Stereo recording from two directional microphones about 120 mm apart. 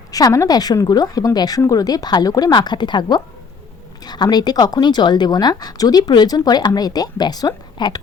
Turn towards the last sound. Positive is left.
turn(degrees=35)  # may be behind; listen again after turning